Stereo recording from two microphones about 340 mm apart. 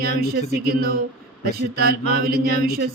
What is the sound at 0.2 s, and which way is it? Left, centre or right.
A man's voice, right.